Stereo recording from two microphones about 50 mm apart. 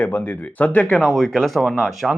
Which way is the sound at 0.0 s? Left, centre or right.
Left.